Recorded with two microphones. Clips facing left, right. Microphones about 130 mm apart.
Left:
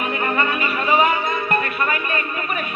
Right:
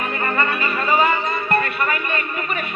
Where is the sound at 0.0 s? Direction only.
15° left (ahead or behind).